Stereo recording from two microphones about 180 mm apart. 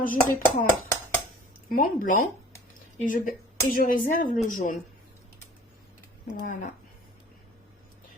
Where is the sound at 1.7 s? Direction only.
50° left (ahead or behind).